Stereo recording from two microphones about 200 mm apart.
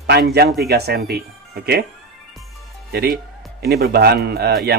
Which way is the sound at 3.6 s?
50° right (ahead or behind).